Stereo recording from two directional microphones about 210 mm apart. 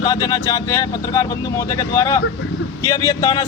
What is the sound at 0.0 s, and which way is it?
A man's voice, 15° left (ahead or behind).